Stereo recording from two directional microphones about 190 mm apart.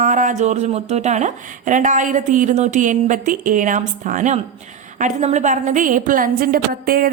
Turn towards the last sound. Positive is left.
turn(degrees=-50)  # may be behind; listen again after turning